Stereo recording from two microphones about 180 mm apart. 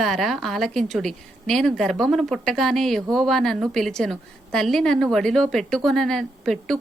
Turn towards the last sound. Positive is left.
turn(degrees=0)  # may be behind; listen again after turning